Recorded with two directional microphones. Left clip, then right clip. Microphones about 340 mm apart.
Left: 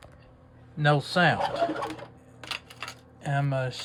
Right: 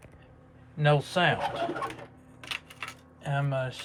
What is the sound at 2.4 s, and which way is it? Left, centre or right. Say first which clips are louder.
Camera: left 1 dB; left.